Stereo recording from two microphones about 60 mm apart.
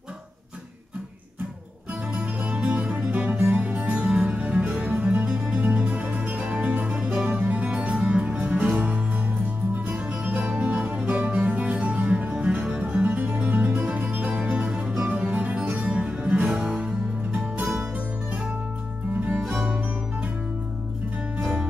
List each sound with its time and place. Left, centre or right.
2.1 s music: centre
7.2 s music: right
16.4 s music: centre
18.3 s music: right
21.4 s music: centre